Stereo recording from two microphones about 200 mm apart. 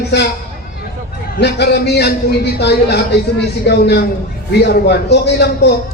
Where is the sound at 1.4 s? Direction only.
55° left (ahead or behind).